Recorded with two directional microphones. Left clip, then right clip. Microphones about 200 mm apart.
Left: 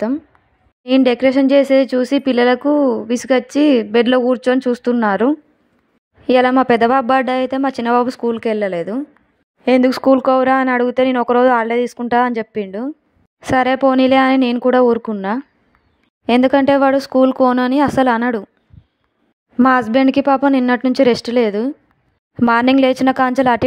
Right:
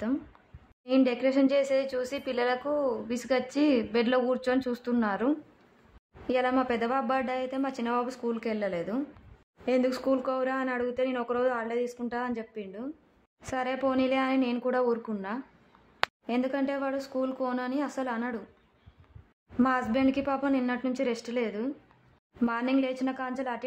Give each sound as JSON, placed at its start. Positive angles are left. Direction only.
{"t": 0.8, "sound": "speech", "side_deg": 40}
{"t": 19.5, "sound": "speech", "side_deg": 45}